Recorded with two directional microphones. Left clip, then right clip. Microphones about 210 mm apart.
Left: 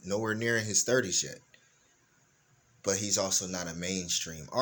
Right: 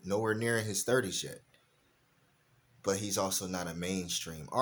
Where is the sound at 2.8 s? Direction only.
10° right (ahead or behind).